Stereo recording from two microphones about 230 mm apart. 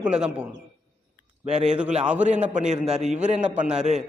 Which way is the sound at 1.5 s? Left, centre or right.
Right.